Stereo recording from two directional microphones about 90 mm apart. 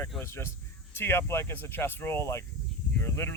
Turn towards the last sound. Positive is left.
turn(degrees=25)  # may be behind; listen again after turning